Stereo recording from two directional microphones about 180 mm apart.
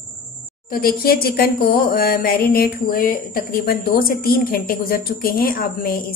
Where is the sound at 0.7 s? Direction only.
55° left (ahead or behind).